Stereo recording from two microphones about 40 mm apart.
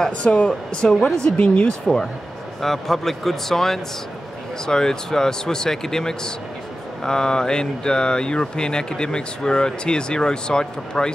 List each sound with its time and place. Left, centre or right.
0.2 s speech: left
0.5 s speech: centre
1.3 s speech: left
2.6 s speech: centre